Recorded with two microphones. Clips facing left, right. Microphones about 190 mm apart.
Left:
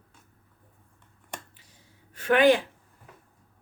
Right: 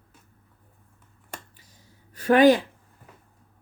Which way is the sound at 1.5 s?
40° right (ahead or behind).